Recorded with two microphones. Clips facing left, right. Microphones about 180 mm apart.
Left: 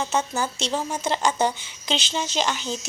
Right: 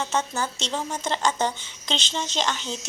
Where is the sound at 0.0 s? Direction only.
10° left (ahead or behind).